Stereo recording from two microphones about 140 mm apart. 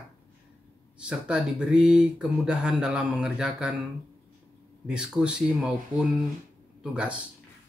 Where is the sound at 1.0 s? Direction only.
5° right (ahead or behind).